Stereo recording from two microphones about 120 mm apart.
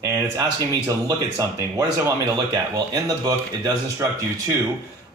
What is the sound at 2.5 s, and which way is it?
Speech, 35° right (ahead or behind).